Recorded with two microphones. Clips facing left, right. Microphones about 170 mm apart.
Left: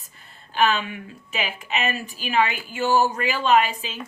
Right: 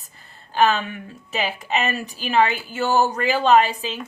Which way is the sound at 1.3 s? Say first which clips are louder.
Right 4 dB; 40° right (ahead or behind).